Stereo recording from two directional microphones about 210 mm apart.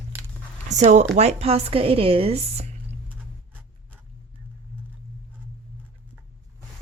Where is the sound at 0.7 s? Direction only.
35° right (ahead or behind).